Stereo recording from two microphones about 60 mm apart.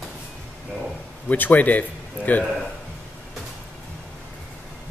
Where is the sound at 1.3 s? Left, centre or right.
Left.